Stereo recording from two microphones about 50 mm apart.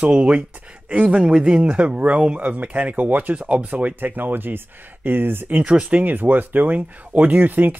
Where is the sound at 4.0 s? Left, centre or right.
Right.